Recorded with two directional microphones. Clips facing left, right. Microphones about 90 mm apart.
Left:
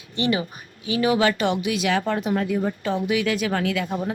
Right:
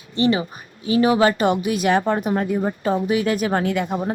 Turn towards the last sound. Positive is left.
turn(degrees=-35)  # may be behind; listen again after turning